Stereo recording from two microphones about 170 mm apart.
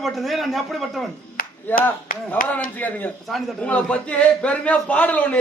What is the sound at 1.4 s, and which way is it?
Clapping, 55° left (ahead or behind).